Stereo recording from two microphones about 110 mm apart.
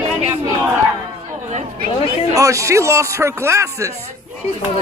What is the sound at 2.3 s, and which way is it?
Speech, 30° right (ahead or behind).